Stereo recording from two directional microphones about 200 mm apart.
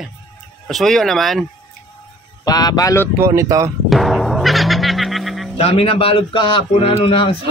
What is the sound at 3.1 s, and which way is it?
Speech, 15° right (ahead or behind).